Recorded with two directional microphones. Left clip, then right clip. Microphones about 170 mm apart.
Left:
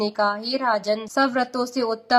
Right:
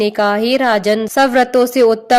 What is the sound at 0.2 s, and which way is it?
Speech, 35° right (ahead or behind).